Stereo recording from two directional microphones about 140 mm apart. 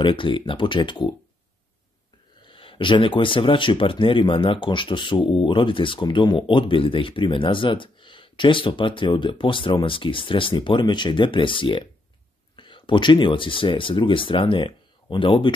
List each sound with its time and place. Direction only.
0.0 s speech: 35° left (ahead or behind)
2.4 s speech: 40° left (ahead or behind)